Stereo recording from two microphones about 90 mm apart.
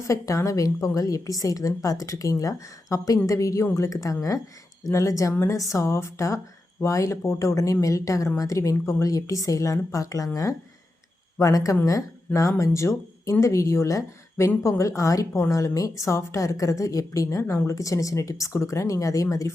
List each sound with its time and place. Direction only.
0.1 s a woman's voice: 35° left (ahead or behind)
11.3 s a woman's voice: 40° left (ahead or behind)
17.2 s a woman's voice: 30° left (ahead or behind)